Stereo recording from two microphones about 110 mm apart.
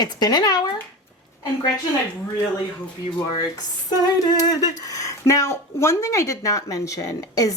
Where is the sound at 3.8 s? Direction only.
35° left (ahead or behind).